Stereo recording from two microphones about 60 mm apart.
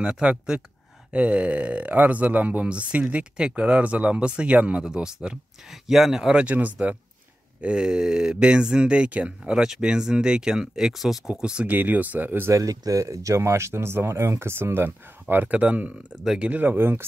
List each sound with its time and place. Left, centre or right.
0.0 s speech: centre
6.4 s speech: right
7.6 s speech: centre
11.7 s speech: right
12.4 s speech: right
14.9 s speech: right
16.7 s speech: right